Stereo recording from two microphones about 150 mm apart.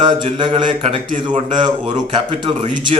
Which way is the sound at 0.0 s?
30° right (ahead or behind).